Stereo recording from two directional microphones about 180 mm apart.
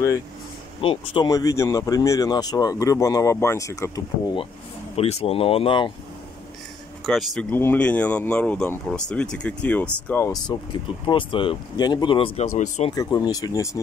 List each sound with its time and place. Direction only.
0.7 s speech: 30° left (ahead or behind)
4.9 s speech: 35° left (ahead or behind)
7.1 s speech: centre (ahead or behind)
11.1 s speech: 30° left (ahead or behind)
12.5 s speech: 40° left (ahead or behind)
12.9 s speech: 20° left (ahead or behind)